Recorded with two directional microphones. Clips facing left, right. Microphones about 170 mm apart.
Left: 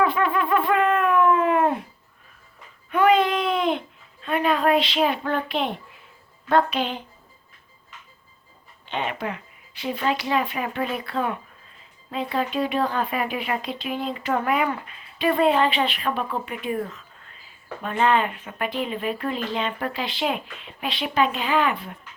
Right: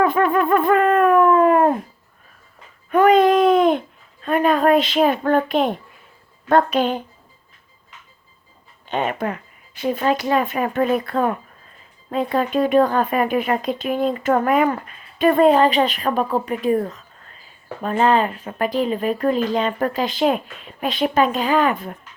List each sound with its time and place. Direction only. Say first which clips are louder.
0.0 s speech: right 5 dB; 45° right (ahead or behind)
2.9 s speech: right 6 dB; 45° right (ahead or behind)
8.9 s speech: right 5 dB; 45° right (ahead or behind)